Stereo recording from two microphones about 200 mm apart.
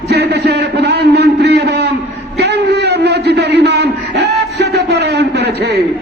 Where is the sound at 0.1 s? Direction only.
55° right (ahead or behind).